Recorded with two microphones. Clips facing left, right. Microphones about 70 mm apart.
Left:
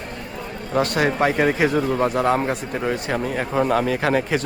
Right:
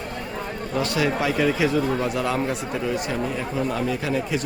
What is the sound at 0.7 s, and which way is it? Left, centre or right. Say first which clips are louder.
Speech: left 4 dB; left.